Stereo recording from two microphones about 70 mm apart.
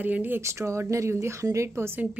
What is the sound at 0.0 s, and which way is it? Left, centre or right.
Speech, right.